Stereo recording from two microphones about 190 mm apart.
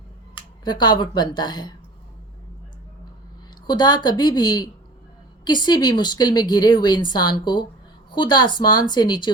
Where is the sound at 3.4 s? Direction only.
20° left (ahead or behind).